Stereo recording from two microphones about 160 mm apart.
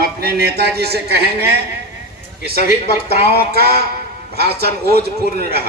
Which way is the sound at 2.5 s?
75° right (ahead or behind).